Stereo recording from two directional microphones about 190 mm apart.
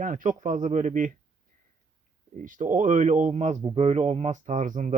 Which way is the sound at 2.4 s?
45° right (ahead or behind).